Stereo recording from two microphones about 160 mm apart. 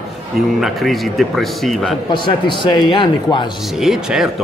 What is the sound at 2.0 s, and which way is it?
A man's voice, 30° left (ahead or behind).